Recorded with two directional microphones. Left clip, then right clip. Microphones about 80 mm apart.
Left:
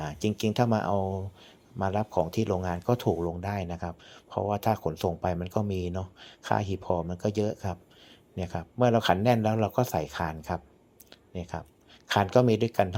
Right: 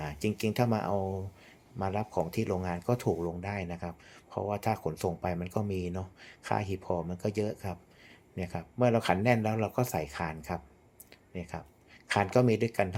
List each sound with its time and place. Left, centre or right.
0.0 s speech: left
11.1 s a sound: left
12.0 s speech: left